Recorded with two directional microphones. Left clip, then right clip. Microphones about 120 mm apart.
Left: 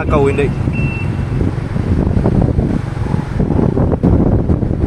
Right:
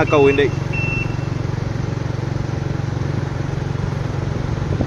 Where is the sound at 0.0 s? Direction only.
Centre (ahead or behind).